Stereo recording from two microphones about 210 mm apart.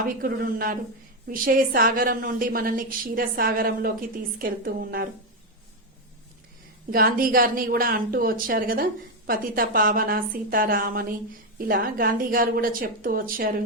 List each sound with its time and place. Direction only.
0.2 s speech: 45° right (ahead or behind)
6.9 s speech: 45° right (ahead or behind)